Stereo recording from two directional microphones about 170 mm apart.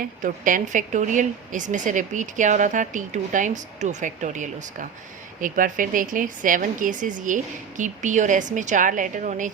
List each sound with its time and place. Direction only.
0.0 s a woman's voice: 50° right (ahead or behind)